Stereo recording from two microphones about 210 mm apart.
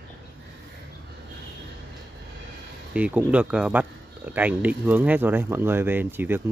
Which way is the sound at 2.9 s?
5° right (ahead or behind).